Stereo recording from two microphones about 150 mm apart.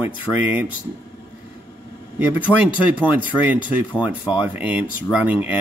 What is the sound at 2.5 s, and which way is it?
Speech, 10° left (ahead or behind).